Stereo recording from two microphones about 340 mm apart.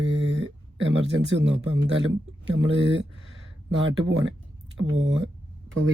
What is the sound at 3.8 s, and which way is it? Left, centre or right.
Speech, right.